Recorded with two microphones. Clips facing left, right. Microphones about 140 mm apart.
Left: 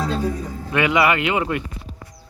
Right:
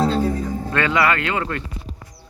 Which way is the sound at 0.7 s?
15° left (ahead or behind).